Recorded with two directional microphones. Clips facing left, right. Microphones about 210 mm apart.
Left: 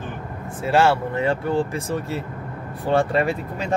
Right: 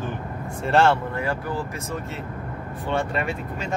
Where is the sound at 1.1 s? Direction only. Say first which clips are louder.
Left 6 dB; 25° left (ahead or behind).